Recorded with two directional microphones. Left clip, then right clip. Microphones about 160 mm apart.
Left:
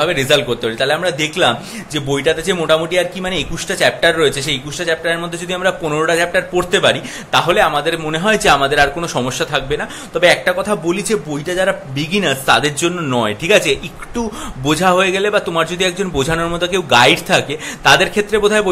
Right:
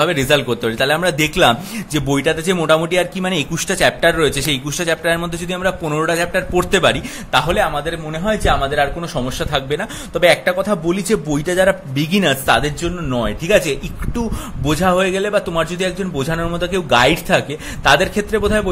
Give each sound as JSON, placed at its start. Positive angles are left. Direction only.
{"t": 0.0, "sound": "a man's voice", "side_deg": -35}
{"t": 7.4, "sound": "a man's voice", "side_deg": -20}
{"t": 8.1, "sound": "a man's voice", "side_deg": -5}
{"t": 9.4, "sound": "speech", "side_deg": -30}
{"t": 12.8, "sound": "speech", "side_deg": -10}